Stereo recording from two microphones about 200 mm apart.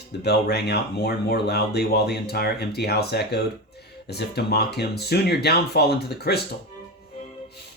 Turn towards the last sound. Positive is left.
turn(degrees=55)  # may be behind; listen again after turning